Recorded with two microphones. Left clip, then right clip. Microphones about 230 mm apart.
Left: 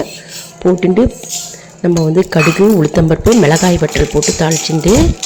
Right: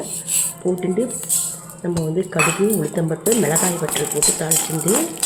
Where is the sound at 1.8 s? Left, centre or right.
Left.